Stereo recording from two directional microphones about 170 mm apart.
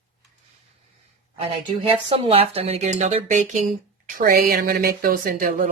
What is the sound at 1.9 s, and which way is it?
Speech, 35° right (ahead or behind).